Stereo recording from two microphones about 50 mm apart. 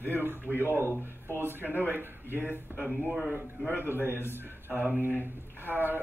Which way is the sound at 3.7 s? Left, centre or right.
Right.